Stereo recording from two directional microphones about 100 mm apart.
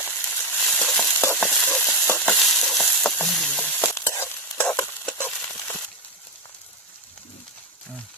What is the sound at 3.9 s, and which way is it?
Stir, 25° left (ahead or behind).